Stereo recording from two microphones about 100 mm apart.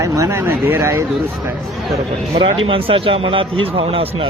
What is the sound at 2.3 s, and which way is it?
Speech, 65° right (ahead or behind).